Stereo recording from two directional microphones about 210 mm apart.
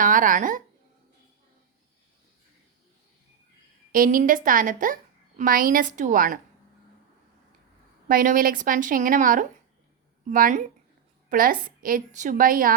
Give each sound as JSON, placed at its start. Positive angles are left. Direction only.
{"t": 0.0, "sound": "speech", "side_deg": -40}
{"t": 3.9, "sound": "a woman's voice", "side_deg": -40}
{"t": 8.0, "sound": "a woman's voice", "side_deg": -40}